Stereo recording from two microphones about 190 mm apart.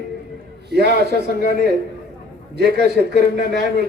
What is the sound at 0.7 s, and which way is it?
Speech, 60° right (ahead or behind).